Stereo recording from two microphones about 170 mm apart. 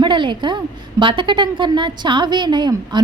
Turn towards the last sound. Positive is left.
turn(degrees=-25)  # may be behind; listen again after turning